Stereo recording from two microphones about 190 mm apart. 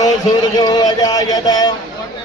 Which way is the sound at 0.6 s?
20° left (ahead or behind).